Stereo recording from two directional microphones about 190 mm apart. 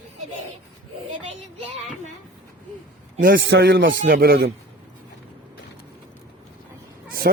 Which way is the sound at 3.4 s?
80° right.